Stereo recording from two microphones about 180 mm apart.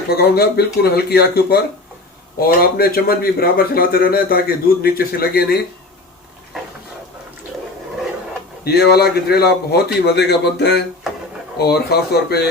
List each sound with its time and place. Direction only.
0.1 s a man's voice: 60° left (ahead or behind)
8.6 s a man's voice: 60° left (ahead or behind)